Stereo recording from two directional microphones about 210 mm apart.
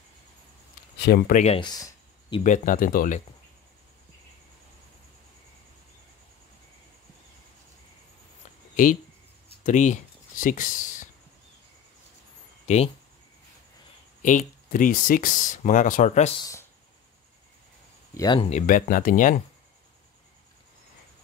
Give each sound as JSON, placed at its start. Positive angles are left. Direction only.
{"t": 0.9, "sound": "speech", "side_deg": 50}
{"t": 1.4, "sound": "speech", "side_deg": 25}
{"t": 2.4, "sound": "speech", "side_deg": 35}
{"t": 9.7, "sound": "speech", "side_deg": 35}
{"t": 12.6, "sound": "speech", "side_deg": 30}
{"t": 14.2, "sound": "speech", "side_deg": 40}
{"t": 16.3, "sound": "speech", "side_deg": 15}
{"t": 18.1, "sound": "speech", "side_deg": 20}
{"t": 18.7, "sound": "speech", "side_deg": 40}